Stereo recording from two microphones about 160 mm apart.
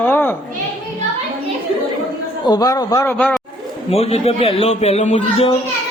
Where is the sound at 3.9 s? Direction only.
40° left (ahead or behind).